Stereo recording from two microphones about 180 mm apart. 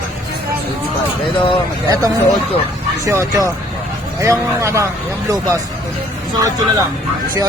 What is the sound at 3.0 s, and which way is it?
A man's voice, 15° right (ahead or behind).